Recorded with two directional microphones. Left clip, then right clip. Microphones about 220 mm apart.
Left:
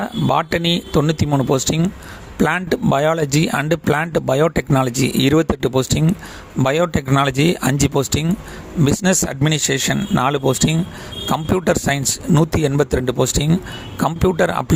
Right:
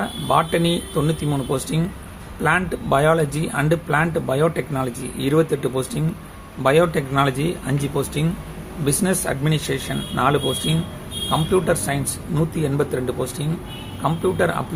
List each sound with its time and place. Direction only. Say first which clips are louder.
0.0 s speech: left 1 dB; 45° left (ahead or behind)